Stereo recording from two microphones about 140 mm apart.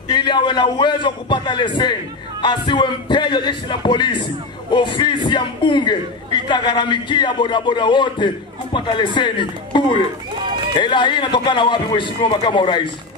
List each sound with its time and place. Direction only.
0.1 s a man's voice: 35° left (ahead or behind)